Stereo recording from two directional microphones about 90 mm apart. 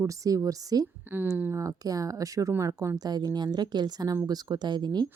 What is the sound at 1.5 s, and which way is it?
A woman's voice, 35° right (ahead or behind).